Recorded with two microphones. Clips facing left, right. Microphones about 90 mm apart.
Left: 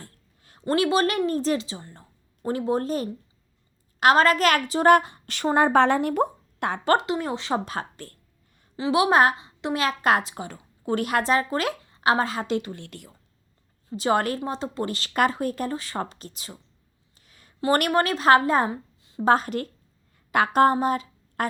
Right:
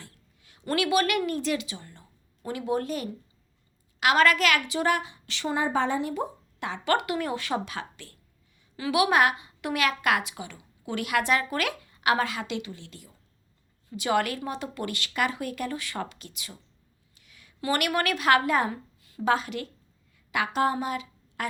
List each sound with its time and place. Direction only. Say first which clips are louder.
0.0 s a sound: left 3 dB; 40° left (ahead or behind)
0.6 s a woman's voice: left 3 dB; 30° left (ahead or behind); by 6.8 s 55° left (ahead or behind)
6.8 s speech: left 3 dB; 30° left (ahead or behind)
7.6 s a woman's voice: left 4 dB; 40° left (ahead or behind)
8.7 s a woman's voice: left 3 dB; 30° left (ahead or behind); by 13.1 s 60° left (ahead or behind)
13.9 s a woman's voice: left 3 dB; 35° left (ahead or behind)
19.2 s a woman's voice: left 5 dB; 40° left (ahead or behind)
20.1 s a sound: left 7 dB; 45° left (ahead or behind)